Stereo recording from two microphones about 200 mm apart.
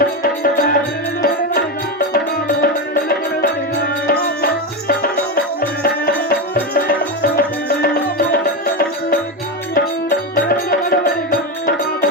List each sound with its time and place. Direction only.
0.0 s music: 45° left (ahead or behind)